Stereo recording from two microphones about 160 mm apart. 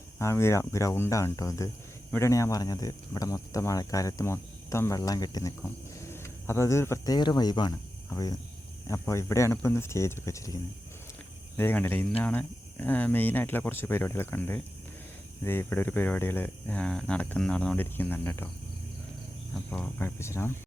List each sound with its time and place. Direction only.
0.2 s speech: 15° left (ahead or behind)
19.5 s speech: 10° left (ahead or behind)